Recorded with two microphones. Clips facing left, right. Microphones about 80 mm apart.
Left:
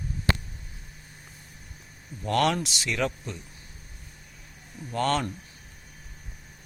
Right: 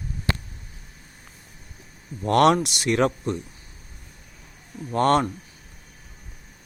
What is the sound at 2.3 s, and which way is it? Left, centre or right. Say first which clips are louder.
Speech: right 7 dB; right.